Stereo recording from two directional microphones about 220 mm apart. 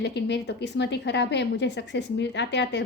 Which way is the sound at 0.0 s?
50° left (ahead or behind).